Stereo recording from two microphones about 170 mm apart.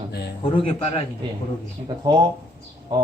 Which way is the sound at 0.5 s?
35° left (ahead or behind).